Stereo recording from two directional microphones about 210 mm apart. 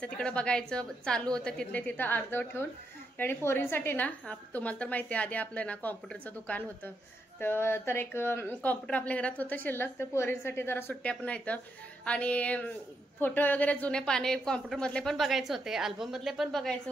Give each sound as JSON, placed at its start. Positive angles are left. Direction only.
{"t": 0.0, "sound": "a woman's voice", "side_deg": 5}
{"t": 7.3, "sound": "a woman's voice", "side_deg": 10}